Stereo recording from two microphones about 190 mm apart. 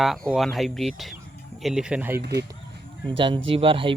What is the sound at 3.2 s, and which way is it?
Speech, 25° right (ahead or behind).